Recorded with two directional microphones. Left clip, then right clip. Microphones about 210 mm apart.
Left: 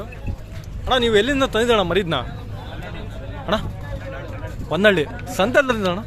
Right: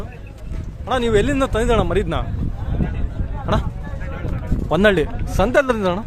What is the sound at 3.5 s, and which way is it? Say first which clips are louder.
Speech: even; 5° right (ahead or behind).